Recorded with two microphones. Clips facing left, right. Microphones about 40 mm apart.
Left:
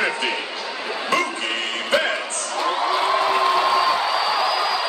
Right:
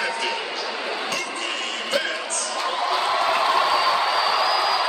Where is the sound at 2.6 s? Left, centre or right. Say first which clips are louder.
Left 3 dB; centre.